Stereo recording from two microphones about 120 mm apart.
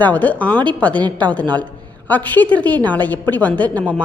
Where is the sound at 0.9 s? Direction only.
40° right (ahead or behind).